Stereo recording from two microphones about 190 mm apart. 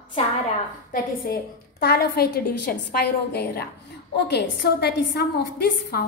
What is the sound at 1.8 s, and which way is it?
A woman's voice, 55° left (ahead or behind).